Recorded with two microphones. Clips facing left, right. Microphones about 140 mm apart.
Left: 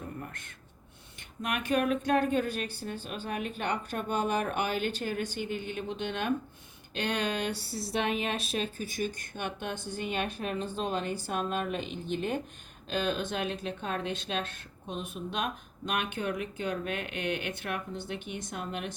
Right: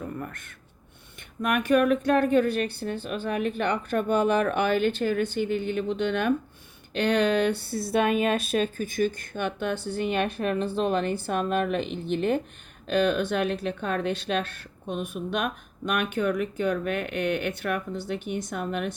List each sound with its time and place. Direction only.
1.4 s speech: 60° right (ahead or behind)
9.3 s speech: 50° right (ahead or behind)
9.7 s a woman's voice: 15° left (ahead or behind)
10.0 s speech: 55° right (ahead or behind)